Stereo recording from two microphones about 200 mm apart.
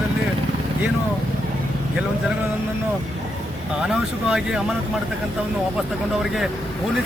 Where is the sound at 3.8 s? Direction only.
5° right (ahead or behind).